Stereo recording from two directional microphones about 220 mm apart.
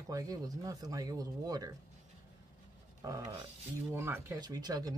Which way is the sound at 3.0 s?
15° right (ahead or behind).